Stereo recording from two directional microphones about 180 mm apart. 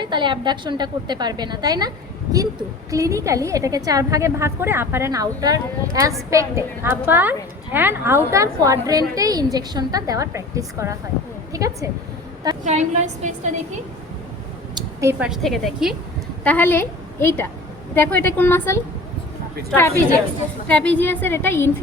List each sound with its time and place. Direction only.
0.0 s a woman's voice: 25° right (ahead or behind)
12.6 s a woman's voice: 40° right (ahead or behind)
15.2 s a woman's voice: centre (ahead or behind)
16.4 s a woman's voice: 10° left (ahead or behind)
20.7 s a woman's voice: 5° left (ahead or behind)